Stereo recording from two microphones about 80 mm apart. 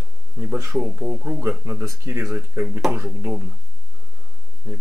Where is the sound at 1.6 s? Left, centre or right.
Right.